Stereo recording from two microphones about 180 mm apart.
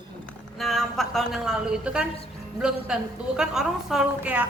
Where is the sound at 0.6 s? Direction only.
Centre (ahead or behind).